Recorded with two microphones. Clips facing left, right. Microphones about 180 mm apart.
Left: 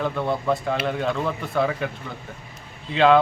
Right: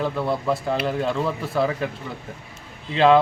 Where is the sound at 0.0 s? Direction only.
Centre (ahead or behind).